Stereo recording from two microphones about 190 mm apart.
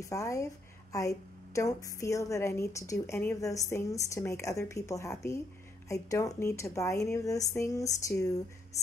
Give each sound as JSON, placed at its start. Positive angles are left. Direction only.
{"t": 0.0, "sound": "a woman's voice", "side_deg": 15}